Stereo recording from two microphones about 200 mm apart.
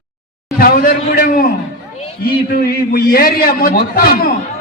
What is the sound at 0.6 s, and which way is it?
Speech, 45° left (ahead or behind).